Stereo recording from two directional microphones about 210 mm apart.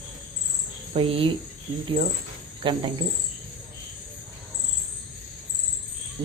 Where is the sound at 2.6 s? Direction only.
25° right (ahead or behind).